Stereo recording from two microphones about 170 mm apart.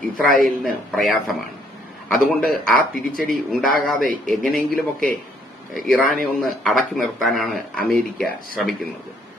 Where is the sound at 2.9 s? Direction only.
55° right (ahead or behind).